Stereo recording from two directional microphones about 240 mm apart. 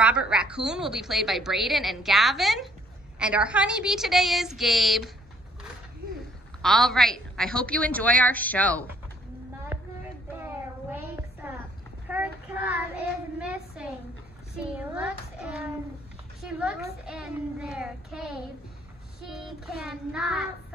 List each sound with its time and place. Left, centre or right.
0.0 s a woman's voice: centre
6.6 s a woman's voice: centre
10.4 s a sound: centre
12.1 s child singing: centre
13.4 s a sound: centre
14.6 s a child's voice: centre